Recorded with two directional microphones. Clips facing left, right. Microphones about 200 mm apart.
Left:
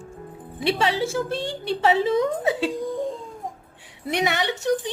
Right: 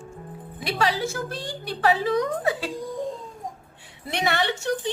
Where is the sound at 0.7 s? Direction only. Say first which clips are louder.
Left 3 dB; 25° left (ahead or behind).